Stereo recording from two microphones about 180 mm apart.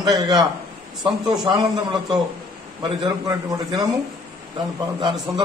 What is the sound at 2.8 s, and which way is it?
A man's voice, 20° right (ahead or behind).